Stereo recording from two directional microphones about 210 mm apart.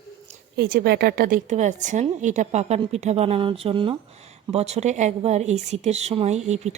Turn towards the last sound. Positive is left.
turn(degrees=-30)  # may be behind; listen again after turning